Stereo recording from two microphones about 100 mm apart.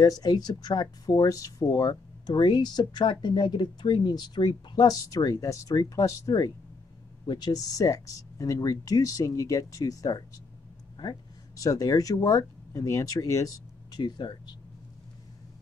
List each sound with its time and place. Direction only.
0.0 s speech: 40° left (ahead or behind)
13.9 s speech: 45° left (ahead or behind)